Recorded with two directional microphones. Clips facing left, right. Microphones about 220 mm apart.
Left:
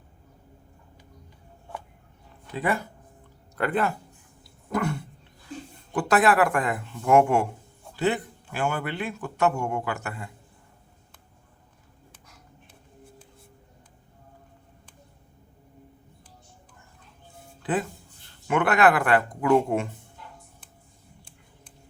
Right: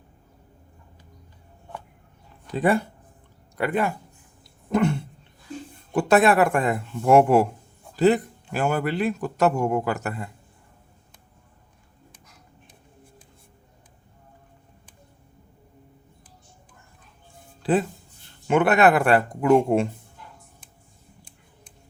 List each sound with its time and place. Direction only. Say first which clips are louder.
2.5 s a man's voice: right 6 dB; 30° right (ahead or behind)
3.5 s speech: right 1 dB; 10° right (ahead or behind)
4.7 s a man's voice: right 6 dB; 25° right (ahead or behind)
17.6 s speech: right 5 dB; 30° right (ahead or behind)